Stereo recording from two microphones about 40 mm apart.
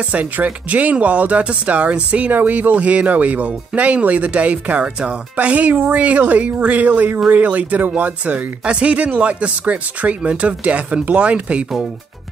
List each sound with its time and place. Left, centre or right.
0.1 s speech: right